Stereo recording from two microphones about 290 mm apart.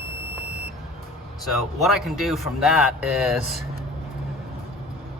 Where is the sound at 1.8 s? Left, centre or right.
Centre.